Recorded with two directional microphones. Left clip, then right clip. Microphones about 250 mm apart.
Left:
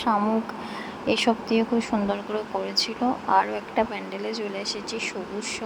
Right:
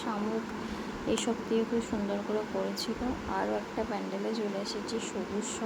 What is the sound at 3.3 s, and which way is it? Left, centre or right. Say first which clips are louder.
Speech: left 11 dB; left.